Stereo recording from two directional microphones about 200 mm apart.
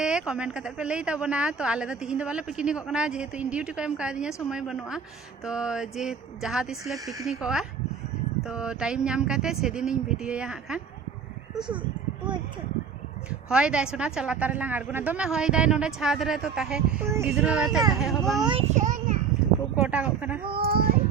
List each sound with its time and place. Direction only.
0.0 s a woman's voice: 5° right (ahead or behind)
7.0 s speech: 15° right (ahead or behind)
7.3 s a woman's voice: 5° right (ahead or behind)
11.5 s speech: 25° right (ahead or behind)
13.5 s a woman's voice: 5° right (ahead or behind)
18.7 s a child's voice: 40° right (ahead or behind)
19.7 s speech: 5° right (ahead or behind)
20.6 s speech: 50° right (ahead or behind)